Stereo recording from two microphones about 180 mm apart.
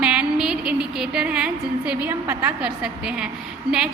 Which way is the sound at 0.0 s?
5° right (ahead or behind).